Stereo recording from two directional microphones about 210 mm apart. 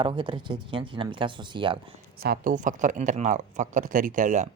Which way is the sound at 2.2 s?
45° right (ahead or behind).